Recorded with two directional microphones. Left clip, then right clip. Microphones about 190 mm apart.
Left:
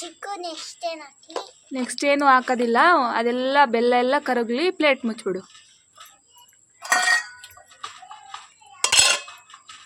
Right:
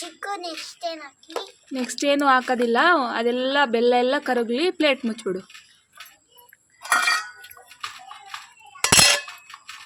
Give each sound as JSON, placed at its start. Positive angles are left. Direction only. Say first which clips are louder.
{"t": 0.0, "sound": "child singing", "louder": "right 1 dB", "side_deg": 15}
{"t": 1.3, "sound": "speech", "louder": "even", "side_deg": -5}
{"t": 6.8, "sound": "a sound", "louder": "left 1 dB", "side_deg": 55}
{"t": 8.8, "sound": "cutlery", "louder": "right 2 dB", "side_deg": -5}